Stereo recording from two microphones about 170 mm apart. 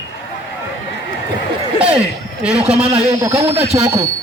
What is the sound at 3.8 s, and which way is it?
Speech, 15° right (ahead or behind).